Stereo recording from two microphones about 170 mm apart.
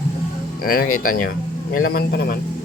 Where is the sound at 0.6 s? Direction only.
60° left (ahead or behind).